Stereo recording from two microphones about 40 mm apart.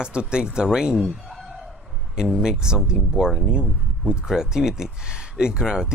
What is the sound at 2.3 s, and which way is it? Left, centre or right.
Speech, centre.